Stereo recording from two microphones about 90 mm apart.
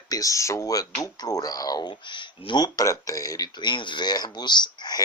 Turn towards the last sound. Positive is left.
turn(degrees=55)  # may be behind; listen again after turning